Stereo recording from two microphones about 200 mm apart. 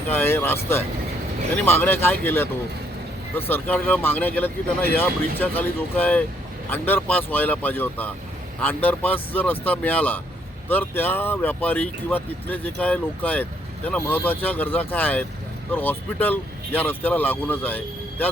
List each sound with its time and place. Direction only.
0.1 s speech: 10° left (ahead or behind)